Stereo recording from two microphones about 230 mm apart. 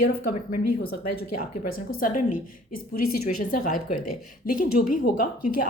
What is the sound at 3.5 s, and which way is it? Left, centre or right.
A woman's voice, left.